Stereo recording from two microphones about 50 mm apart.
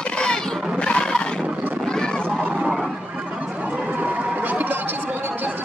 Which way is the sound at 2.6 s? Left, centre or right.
Centre.